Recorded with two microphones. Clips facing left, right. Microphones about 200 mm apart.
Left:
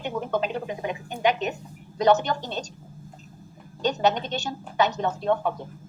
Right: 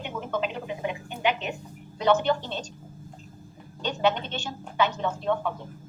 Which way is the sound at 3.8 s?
40° left (ahead or behind).